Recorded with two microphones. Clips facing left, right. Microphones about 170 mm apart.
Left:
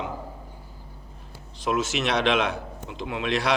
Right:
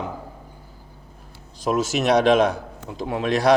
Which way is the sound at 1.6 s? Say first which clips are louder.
Right 5 dB; 40° right (ahead or behind).